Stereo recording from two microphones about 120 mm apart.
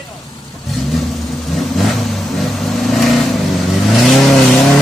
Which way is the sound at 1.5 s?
Centre (ahead or behind).